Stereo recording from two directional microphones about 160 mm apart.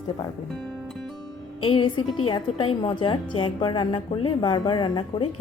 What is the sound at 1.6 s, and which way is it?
A woman's voice, 30° left (ahead or behind).